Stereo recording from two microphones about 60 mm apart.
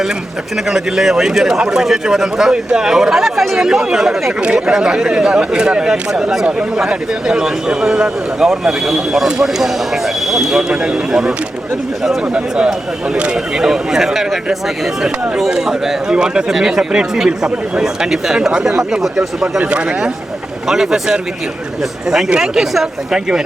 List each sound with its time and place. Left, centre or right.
0.7 s speech: centre
22.3 s speech: centre